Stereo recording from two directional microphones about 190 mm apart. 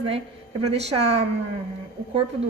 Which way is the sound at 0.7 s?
35° right (ahead or behind).